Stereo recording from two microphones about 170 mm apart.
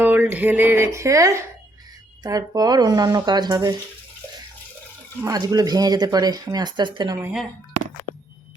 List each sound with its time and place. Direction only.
0.0 s speech: 10° right (ahead or behind)
5.2 s speech: 20° right (ahead or behind)